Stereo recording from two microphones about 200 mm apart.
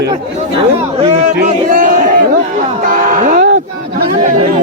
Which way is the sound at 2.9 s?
45° right (ahead or behind).